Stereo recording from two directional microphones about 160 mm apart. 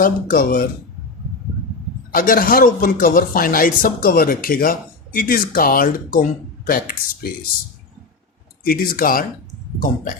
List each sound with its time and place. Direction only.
0.0 s speech: 60° left (ahead or behind)
2.1 s speech: 60° left (ahead or behind)
8.6 s speech: 65° left (ahead or behind)